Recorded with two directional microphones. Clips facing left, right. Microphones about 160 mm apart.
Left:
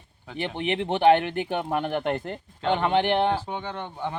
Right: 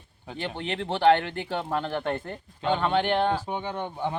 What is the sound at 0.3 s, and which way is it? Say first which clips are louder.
Speech: left 4 dB; 15° left (ahead or behind).